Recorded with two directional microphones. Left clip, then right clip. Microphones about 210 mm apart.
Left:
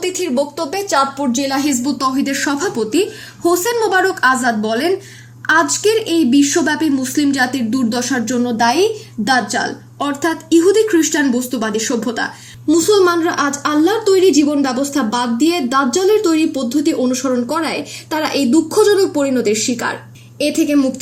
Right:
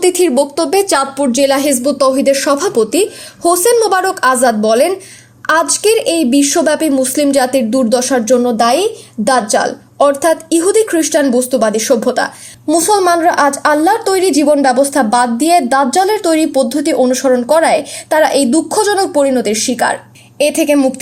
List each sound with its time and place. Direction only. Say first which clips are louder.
0.0 s a woman's voice: right 7 dB; 35° right (ahead or behind)
10.0 s a woman's voice: right 9 dB; 35° right (ahead or behind)